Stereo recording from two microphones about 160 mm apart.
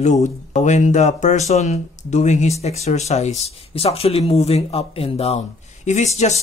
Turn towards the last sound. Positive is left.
turn(degrees=45)  # may be behind; listen again after turning